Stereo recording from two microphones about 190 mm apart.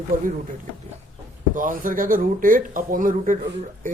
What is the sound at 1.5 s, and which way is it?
Speech, 45° right (ahead or behind).